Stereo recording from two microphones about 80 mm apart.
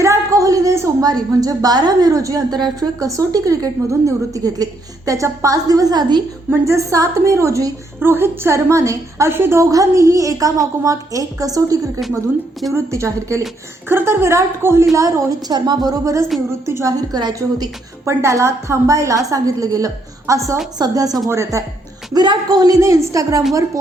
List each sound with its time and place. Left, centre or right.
0.0 s a sound: right
1.0 s a woman's voice: right
6.7 s a woman's voice: right
7.9 s a woman's voice: right
9.6 s a woman's voice: right
12.7 s a woman's voice: right
13.8 s a woman's voice: right
15.4 s a woman's voice: right
18.0 s a woman's voice: right
20.7 s a woman's voice: right
21.2 s a woman's voice: right
22.1 s a woman's voice: right
22.8 s a woman's voice: right